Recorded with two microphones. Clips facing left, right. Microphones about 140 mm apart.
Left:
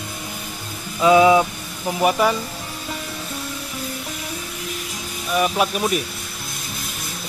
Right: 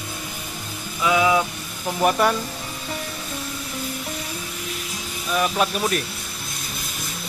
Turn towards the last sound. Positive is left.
turn(degrees=5)  # may be behind; listen again after turning